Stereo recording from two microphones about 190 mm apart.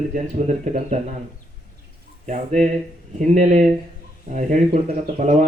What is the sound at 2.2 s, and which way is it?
A man's voice, 40° right (ahead or behind).